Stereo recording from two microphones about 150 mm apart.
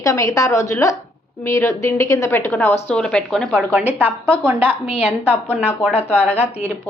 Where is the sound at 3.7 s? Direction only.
10° right (ahead or behind).